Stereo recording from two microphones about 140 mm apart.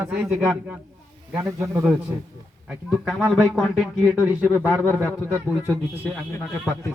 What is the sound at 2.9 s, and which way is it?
Speech, centre (ahead or behind).